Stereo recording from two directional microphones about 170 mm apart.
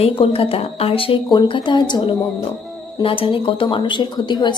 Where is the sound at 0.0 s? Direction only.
35° left (ahead or behind).